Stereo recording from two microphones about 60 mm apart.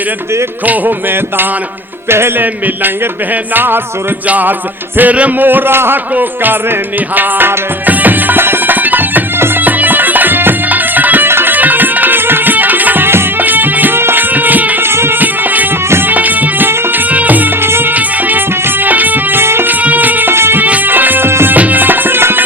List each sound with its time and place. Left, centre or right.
2.0 s music: right
3.5 s speech: right
4.3 s music: right
5.5 s speech: right
7.2 s music: right
14.8 s music: right
17.6 s music: right
17.9 s music: right
19.8 s music: right
20.3 s music: right
20.6 s music: right
21.5 s music: right